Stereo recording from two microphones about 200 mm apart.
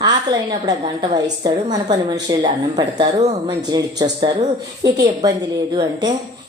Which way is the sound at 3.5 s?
20° right (ahead or behind).